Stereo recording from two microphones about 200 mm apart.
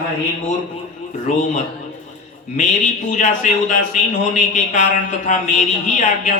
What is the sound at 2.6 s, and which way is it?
A woman's voice, 40° left (ahead or behind).